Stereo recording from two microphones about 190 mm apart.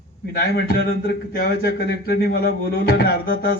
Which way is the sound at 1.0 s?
55° left (ahead or behind).